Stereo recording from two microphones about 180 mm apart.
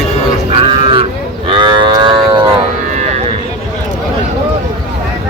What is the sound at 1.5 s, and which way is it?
Moo, 25° right (ahead or behind).